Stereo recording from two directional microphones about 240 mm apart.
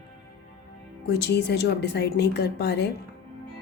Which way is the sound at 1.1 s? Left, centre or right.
Left.